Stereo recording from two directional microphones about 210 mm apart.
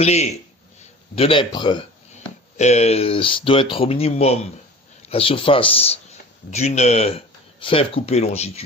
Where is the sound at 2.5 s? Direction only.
30° left (ahead or behind).